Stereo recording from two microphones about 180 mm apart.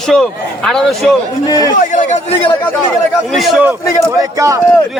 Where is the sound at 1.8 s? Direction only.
45° left (ahead or behind).